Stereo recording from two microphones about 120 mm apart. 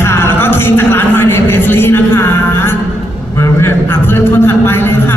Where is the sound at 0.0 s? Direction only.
20° left (ahead or behind).